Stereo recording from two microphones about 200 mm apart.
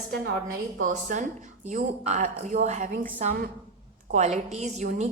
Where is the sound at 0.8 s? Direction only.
40° right (ahead or behind).